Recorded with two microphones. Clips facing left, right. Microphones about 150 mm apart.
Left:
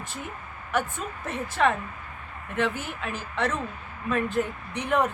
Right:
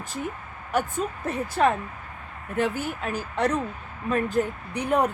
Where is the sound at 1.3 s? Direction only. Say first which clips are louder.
Right 1 dB; 40° right (ahead or behind).